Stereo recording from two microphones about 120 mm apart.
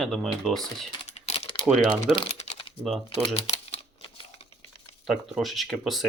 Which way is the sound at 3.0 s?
50° left (ahead or behind).